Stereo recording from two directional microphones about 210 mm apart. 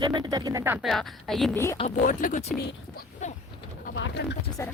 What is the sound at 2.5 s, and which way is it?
Speech, 45° left (ahead or behind).